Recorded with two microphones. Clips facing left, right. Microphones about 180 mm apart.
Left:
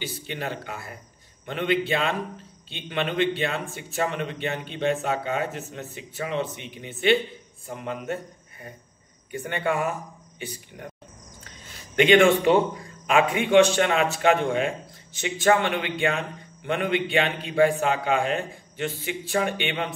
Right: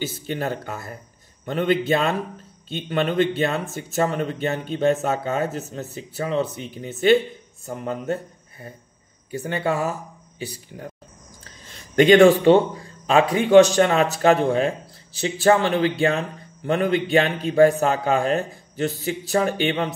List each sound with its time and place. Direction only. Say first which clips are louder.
0.3 s a man's voice: right 5 dB; 45° right (ahead or behind)